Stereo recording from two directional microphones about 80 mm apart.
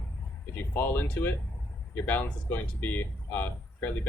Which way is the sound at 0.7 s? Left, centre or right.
Left.